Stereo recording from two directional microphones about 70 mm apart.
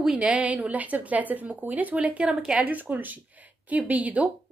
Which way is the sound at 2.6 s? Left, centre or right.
Right.